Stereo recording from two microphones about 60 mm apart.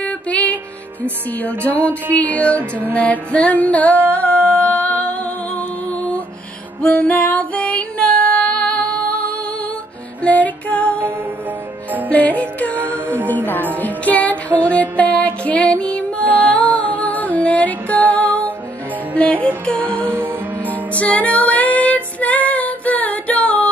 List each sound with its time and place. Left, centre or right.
0.0 s music: left
1.4 s female singing: left
2.9 s music: left
6.8 s female singing: centre
10.2 s music: left
12.1 s music: left
20.0 s music: right
20.7 s music: left